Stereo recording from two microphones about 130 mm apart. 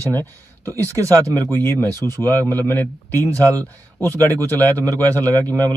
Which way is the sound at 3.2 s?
25° right (ahead or behind).